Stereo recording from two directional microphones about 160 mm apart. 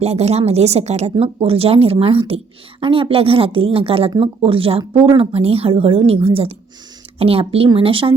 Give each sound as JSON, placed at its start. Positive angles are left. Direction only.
{"t": 0.0, "sound": "speech", "side_deg": -40}